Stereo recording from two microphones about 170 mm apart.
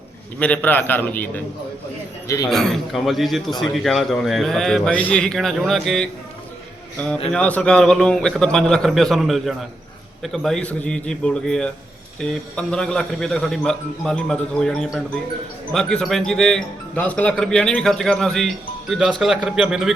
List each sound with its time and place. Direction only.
0.3 s a man's voice: 10° left (ahead or behind)
2.5 s speech: centre (ahead or behind)
7.3 s speech: 5° left (ahead or behind)